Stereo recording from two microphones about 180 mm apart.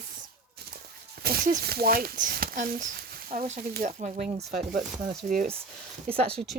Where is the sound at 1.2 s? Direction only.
60° right (ahead or behind); by 4.5 s 40° right (ahead or behind).